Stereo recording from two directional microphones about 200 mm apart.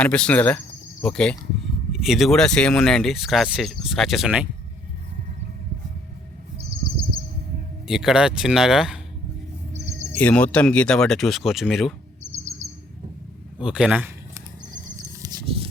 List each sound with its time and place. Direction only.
0.0 s speech: 5° left (ahead or behind)
6.6 s bird: 25° right (ahead or behind)
7.9 s speech: centre (ahead or behind)
10.2 s speech: 5° left (ahead or behind)
13.6 s speech: 5° right (ahead or behind)
15.2 s a sound: 25° right (ahead or behind)